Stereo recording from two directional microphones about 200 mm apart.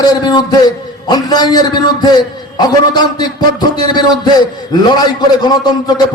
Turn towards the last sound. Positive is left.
turn(degrees=20)  # may be behind; listen again after turning